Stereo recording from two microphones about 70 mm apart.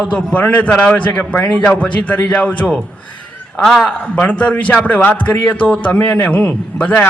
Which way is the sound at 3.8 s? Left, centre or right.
Centre.